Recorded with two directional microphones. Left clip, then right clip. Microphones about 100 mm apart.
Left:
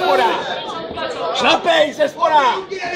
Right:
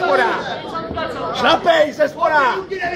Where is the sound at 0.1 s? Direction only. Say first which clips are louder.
Left 1 dB; 35° left (ahead or behind).